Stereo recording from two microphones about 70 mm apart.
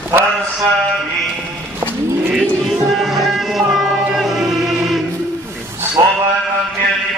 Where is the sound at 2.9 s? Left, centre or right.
Centre.